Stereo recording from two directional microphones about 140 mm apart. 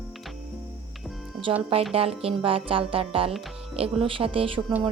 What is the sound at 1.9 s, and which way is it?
A woman's voice, 45° right (ahead or behind).